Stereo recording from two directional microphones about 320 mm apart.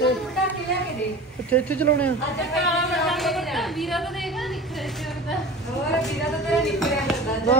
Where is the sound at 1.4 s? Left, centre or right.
Centre.